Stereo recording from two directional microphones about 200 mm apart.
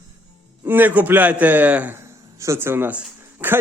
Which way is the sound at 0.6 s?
10° right (ahead or behind).